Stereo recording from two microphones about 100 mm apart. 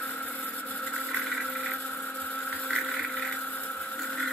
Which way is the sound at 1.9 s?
15° left (ahead or behind).